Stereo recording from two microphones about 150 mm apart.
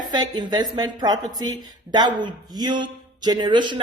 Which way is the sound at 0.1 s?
30° right (ahead or behind).